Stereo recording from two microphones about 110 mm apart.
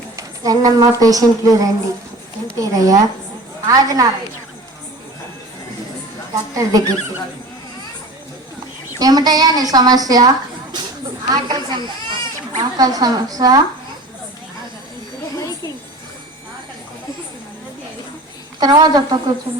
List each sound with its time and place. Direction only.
0.2 s speech: 35° right (ahead or behind)
6.3 s speech: 35° right (ahead or behind)
9.0 s a woman's voice: 35° right (ahead or behind)
15.4 s a sound: 30° left (ahead or behind)
18.6 s speech: 35° right (ahead or behind)